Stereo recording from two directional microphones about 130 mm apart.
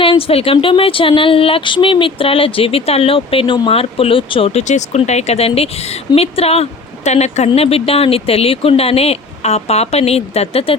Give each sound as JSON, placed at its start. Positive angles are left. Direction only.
{"t": 0.0, "sound": "speech", "side_deg": 45}
{"t": 4.7, "sound": "speech", "side_deg": 60}